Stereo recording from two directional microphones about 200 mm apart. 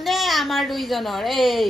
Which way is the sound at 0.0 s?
Centre (ahead or behind).